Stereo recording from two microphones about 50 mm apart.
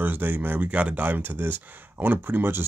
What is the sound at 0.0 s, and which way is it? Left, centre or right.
Speech, right.